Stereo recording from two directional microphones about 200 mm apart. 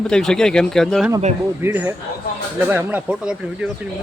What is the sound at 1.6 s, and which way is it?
Speech, 10° right (ahead or behind).